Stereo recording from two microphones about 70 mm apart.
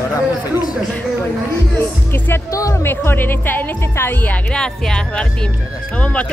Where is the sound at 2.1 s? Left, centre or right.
Left.